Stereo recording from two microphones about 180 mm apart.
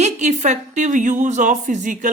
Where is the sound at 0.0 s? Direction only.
40° right (ahead or behind).